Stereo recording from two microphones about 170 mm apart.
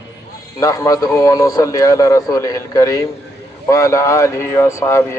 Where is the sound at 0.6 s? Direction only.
20° left (ahead or behind).